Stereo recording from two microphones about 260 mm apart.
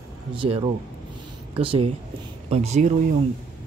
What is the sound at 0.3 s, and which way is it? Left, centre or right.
Speech, centre.